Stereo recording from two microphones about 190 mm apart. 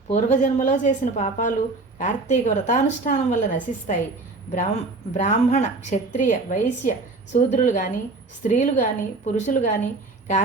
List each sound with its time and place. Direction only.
0.1 s a woman's voice: 40° left (ahead or behind)